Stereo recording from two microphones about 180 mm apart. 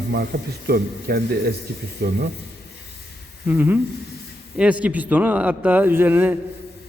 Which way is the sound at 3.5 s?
10° right (ahead or behind).